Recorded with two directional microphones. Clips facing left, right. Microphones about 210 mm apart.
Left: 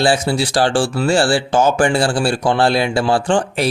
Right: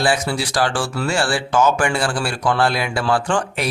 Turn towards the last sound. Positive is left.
turn(degrees=30)  # may be behind; listen again after turning